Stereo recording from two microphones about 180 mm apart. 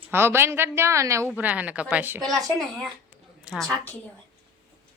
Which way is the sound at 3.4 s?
Centre (ahead or behind).